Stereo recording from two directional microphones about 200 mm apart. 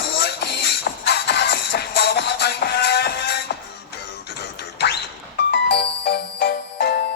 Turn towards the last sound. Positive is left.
turn(degrees=50)  # may be behind; listen again after turning